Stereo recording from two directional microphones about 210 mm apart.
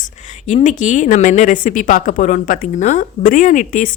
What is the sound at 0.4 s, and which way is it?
A woman's voice, 35° left (ahead or behind).